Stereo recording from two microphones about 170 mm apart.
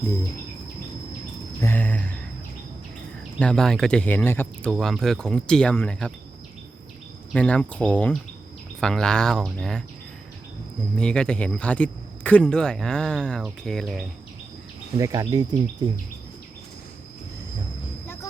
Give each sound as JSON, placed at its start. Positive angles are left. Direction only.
{"t": 1.6, "sound": "cricket", "side_deg": 10}
{"t": 3.3, "sound": "speech", "side_deg": 5}
{"t": 7.3, "sound": "cricket", "side_deg": 5}
{"t": 8.8, "sound": "speech", "side_deg": 5}
{"t": 10.9, "sound": "speech", "side_deg": 5}
{"t": 14.9, "sound": "speech", "side_deg": -20}